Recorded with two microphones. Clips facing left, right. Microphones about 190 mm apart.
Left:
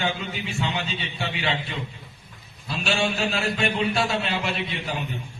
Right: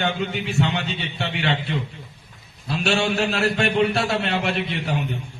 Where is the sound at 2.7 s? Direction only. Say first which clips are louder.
Right 4 dB; 70° right (ahead or behind).